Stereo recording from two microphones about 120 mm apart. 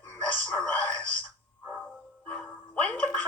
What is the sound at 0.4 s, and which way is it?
Radio, 10° left (ahead or behind).